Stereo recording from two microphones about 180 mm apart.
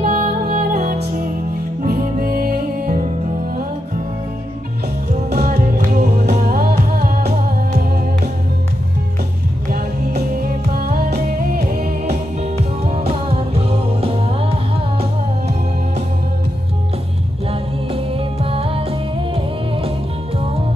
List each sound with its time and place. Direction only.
0.0 s music: 50° right (ahead or behind)
5.3 s music: 60° right (ahead or behind)
9.7 s music: 60° right (ahead or behind)
12.1 s music: 35° right (ahead or behind)
17.5 s music: 30° right (ahead or behind)